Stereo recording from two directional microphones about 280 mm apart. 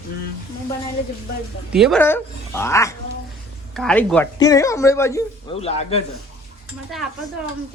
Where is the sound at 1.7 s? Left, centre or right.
Centre.